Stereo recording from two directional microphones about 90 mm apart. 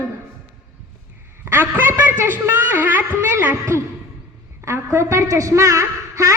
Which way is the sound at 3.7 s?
30° right (ahead or behind).